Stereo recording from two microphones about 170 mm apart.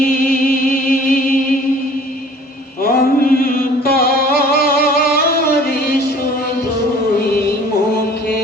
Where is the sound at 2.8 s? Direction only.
60° left (ahead or behind).